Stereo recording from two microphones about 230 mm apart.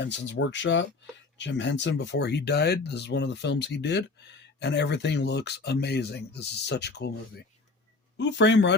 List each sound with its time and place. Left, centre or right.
0.0 s speech: left
8.2 s speech: left